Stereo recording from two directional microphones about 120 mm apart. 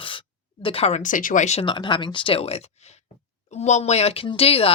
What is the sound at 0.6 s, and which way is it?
Speech, 55° left (ahead or behind).